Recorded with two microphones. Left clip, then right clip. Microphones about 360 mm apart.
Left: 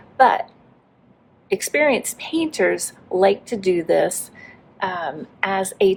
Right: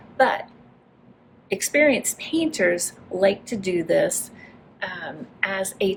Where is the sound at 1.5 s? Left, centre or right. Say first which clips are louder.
Left 1 dB; centre.